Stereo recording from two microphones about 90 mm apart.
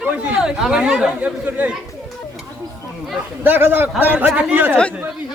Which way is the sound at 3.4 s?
20° right (ahead or behind).